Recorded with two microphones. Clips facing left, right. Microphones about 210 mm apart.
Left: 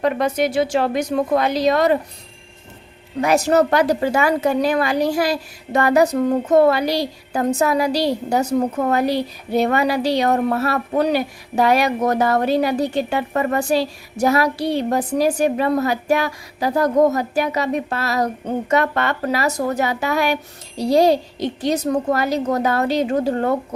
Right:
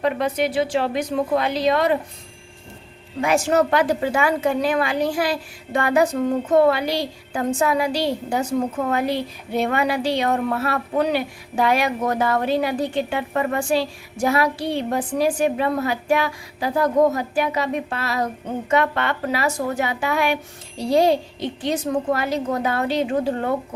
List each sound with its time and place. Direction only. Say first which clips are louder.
0.0 s a woman's voice: left 2 dB; 45° left (ahead or behind)
3.2 s a woman's voice: left 3 dB; 40° left (ahead or behind)